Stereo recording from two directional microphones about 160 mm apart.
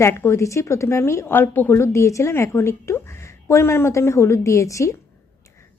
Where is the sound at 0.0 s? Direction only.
15° left (ahead or behind).